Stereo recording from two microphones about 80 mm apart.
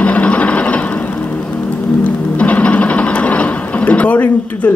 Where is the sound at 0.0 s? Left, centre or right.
Centre.